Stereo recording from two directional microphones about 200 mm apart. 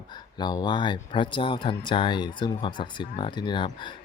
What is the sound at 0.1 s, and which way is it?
Speech, 20° left (ahead or behind).